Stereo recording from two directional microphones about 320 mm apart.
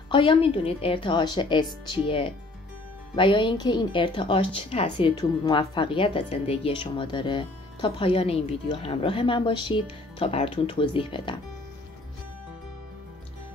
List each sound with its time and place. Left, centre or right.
0.1 s a woman's voice: centre